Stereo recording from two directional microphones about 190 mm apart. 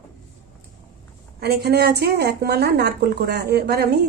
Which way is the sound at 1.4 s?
60° right (ahead or behind).